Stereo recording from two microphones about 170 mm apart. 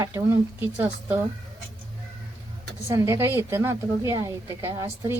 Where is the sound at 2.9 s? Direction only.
15° right (ahead or behind).